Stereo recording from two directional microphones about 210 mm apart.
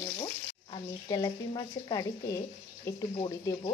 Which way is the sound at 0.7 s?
20° left (ahead or behind).